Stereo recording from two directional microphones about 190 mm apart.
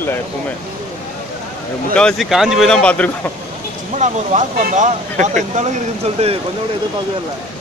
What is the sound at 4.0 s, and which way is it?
Speech, 40° right (ahead or behind).